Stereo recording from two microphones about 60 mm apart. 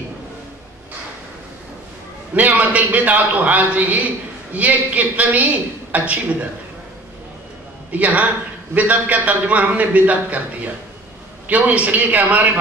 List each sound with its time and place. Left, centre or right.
2.3 s a man's voice: right
7.9 s a man's voice: right